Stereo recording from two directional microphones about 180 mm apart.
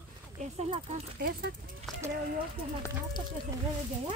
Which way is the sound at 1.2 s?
55° right (ahead or behind).